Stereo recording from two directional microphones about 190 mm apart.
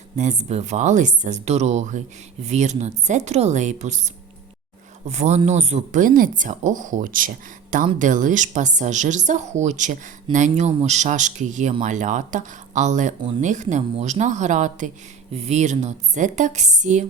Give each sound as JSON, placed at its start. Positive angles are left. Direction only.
{"t": 0.2, "sound": "speech", "side_deg": -40}